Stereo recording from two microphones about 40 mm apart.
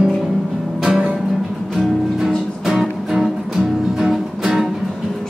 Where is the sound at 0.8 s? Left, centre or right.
Centre.